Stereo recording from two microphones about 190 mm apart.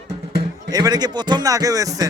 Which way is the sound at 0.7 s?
20° right (ahead or behind).